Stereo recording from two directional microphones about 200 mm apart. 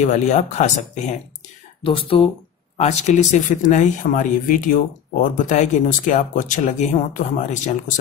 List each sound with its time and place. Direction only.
0.0 s speech: 35° left (ahead or behind)